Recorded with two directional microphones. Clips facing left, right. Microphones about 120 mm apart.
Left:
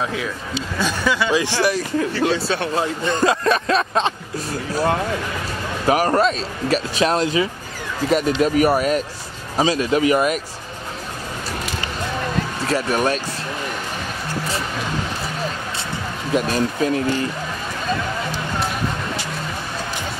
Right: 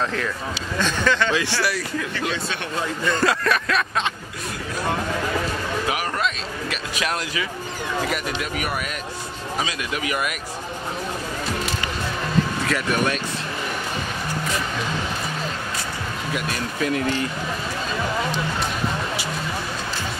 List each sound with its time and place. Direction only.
0.7 s a man's voice: 10° left (ahead or behind)
2.0 s speech: 35° left (ahead or behind)
5.9 s speech: 40° left (ahead or behind)
12.6 s speech: 35° left (ahead or behind)
16.3 s speech: 30° left (ahead or behind)